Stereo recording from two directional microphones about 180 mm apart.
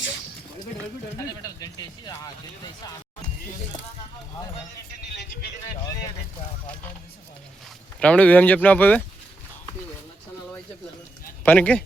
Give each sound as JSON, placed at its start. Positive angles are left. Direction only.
{"t": 1.4, "sound": "speech", "side_deg": 20}
{"t": 7.9, "sound": "speech", "side_deg": 5}
{"t": 11.4, "sound": "speech", "side_deg": 10}